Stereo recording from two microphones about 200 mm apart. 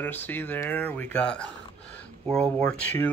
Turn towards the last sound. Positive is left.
turn(degrees=10)  # may be behind; listen again after turning